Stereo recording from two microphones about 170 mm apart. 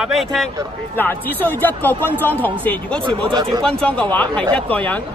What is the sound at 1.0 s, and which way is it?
Speech, 10° left (ahead or behind).